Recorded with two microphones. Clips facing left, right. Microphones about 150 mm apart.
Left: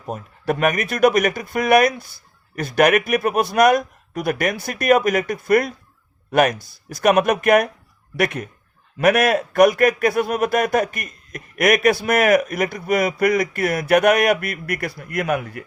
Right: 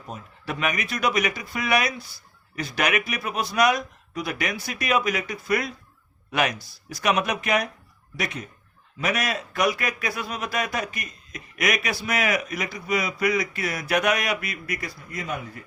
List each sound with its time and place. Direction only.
0.1 s a man's voice: 50° left (ahead or behind); by 15.6 s 70° left (ahead or behind)